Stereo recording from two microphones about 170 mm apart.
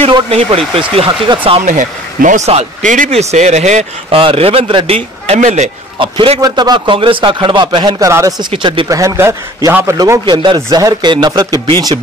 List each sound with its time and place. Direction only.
0.0 s speech: 35° right (ahead or behind)
1.6 s speech: 50° right (ahead or behind); by 5.0 s 35° right (ahead or behind)
5.3 s speech: 45° right (ahead or behind)
5.9 s a man's voice: 30° right (ahead or behind)